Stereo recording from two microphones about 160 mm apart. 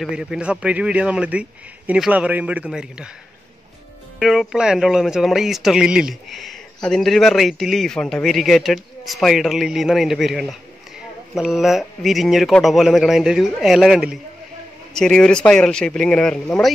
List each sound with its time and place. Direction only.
0.1 s a man's voice: 5° right (ahead or behind)
4.2 s speech: centre (ahead or behind)